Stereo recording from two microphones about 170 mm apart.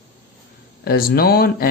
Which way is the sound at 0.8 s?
65° left (ahead or behind).